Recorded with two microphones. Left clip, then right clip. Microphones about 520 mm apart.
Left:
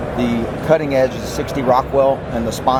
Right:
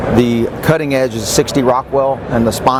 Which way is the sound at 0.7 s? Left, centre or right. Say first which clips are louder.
Right 1 dB; right.